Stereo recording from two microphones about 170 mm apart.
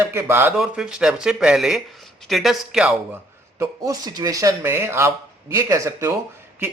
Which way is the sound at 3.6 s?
20° right (ahead or behind).